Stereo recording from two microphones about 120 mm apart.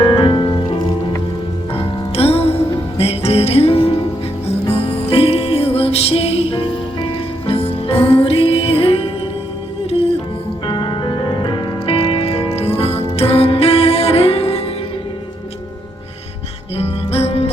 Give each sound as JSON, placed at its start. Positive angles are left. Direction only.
{"t": 0.0, "sound": "music", "side_deg": 40}
{"t": 1.7, "sound": "music", "side_deg": 55}
{"t": 10.7, "sound": "music", "side_deg": 40}
{"t": 16.7, "sound": "music", "side_deg": 60}